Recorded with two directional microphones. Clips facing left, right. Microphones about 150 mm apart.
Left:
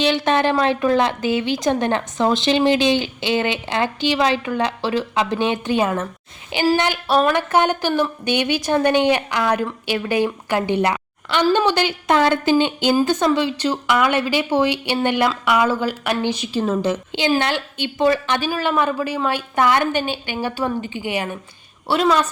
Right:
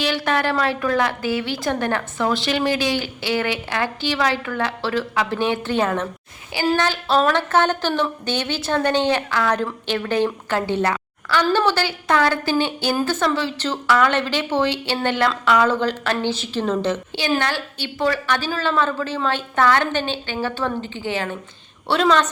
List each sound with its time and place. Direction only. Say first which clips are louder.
0.0 s a woman's voice: left 4 dB; 20° left (ahead or behind)